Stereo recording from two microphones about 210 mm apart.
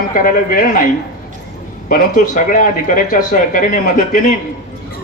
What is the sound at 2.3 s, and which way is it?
Speech, 35° left (ahead or behind).